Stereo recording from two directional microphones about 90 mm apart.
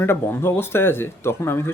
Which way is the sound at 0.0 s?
25° left (ahead or behind).